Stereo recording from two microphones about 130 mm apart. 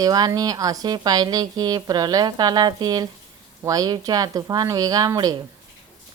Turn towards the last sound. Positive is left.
turn(degrees=-30)  # may be behind; listen again after turning